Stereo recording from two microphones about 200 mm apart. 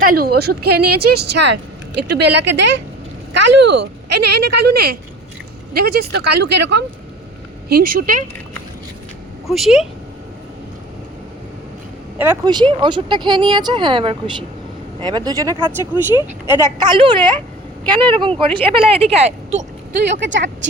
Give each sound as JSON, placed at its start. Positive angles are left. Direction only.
{"t": 0.0, "sound": "speech", "side_deg": -50}
{"t": 7.7, "sound": "speech", "side_deg": -45}
{"t": 9.5, "sound": "speech", "side_deg": 0}
{"t": 12.2, "sound": "speech", "side_deg": -15}
{"t": 16.8, "sound": "speech", "side_deg": -25}
{"t": 19.9, "sound": "speech", "side_deg": -55}